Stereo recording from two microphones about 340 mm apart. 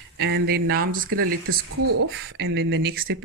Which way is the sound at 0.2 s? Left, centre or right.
Right.